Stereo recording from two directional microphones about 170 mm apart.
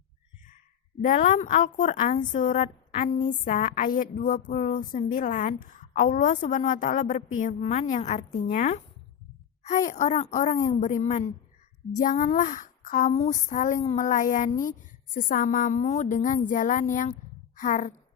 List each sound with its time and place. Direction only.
1.0 s a woman's voice: 50° left (ahead or behind)